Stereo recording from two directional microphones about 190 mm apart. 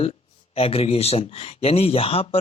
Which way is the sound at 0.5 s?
30° left (ahead or behind).